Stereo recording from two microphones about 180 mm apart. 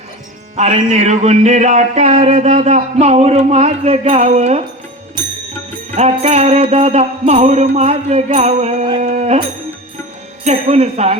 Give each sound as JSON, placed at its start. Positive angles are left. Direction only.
{"t": 0.5, "sound": "music", "side_deg": -40}
{"t": 6.0, "sound": "music", "side_deg": -40}
{"t": 10.4, "sound": "music", "side_deg": -35}